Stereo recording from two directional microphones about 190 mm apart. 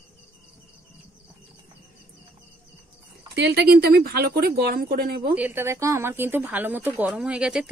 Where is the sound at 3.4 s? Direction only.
55° right (ahead or behind).